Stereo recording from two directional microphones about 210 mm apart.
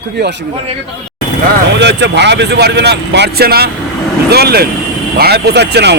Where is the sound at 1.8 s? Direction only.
55° right (ahead or behind).